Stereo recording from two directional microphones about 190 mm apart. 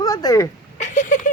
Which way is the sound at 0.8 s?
40° left (ahead or behind).